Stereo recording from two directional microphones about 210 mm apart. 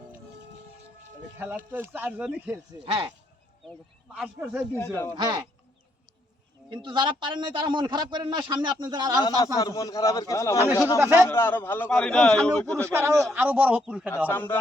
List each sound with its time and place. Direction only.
1.4 s speech: 10° right (ahead or behind)
2.8 s a man's voice: 25° right (ahead or behind)
4.1 s a man's voice: 5° right (ahead or behind)
5.1 s a man's voice: 20° right (ahead or behind)
6.7 s a man's voice: 20° right (ahead or behind)
9.4 s a man's voice: 15° left (ahead or behind)
12.8 s speech: 15° right (ahead or behind)
14.3 s a man's voice: 10° left (ahead or behind)